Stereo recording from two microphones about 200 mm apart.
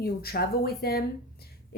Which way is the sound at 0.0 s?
50° left (ahead or behind).